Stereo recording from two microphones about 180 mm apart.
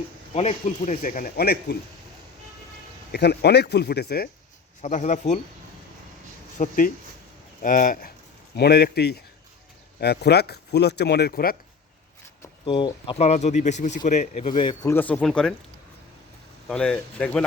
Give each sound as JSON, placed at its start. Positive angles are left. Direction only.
{"t": 0.3, "sound": "speech", "side_deg": 35}
{"t": 3.1, "sound": "speech", "side_deg": 65}
{"t": 4.8, "sound": "speech", "side_deg": 40}
{"t": 6.6, "sound": "speech", "side_deg": 50}
{"t": 8.5, "sound": "speech", "side_deg": 65}
{"t": 12.6, "sound": "speech", "side_deg": 30}
{"t": 14.5, "sound": "speech", "side_deg": 25}
{"t": 14.8, "sound": "speech", "side_deg": 10}
{"t": 16.6, "sound": "speech", "side_deg": 5}